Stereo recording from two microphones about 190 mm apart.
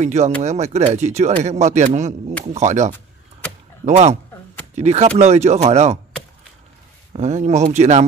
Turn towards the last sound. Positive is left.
turn(degrees=-35)  # may be behind; listen again after turning